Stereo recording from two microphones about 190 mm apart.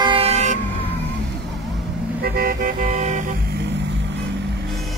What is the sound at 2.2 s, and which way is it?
Vehicle, 50° right (ahead or behind).